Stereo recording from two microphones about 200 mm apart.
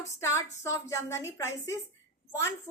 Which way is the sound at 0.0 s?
15° left (ahead or behind).